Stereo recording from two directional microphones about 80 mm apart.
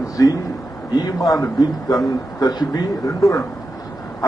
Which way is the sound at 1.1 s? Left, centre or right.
Left.